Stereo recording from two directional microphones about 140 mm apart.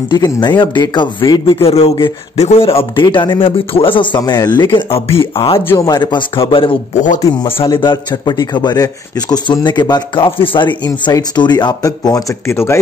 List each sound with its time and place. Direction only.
0.1 s speech: 30° left (ahead or behind)
5.7 s speech: 25° left (ahead or behind)
6.9 s speech: 65° left (ahead or behind)
7.4 s speech: 15° left (ahead or behind)
7.7 s speech: 35° left (ahead or behind)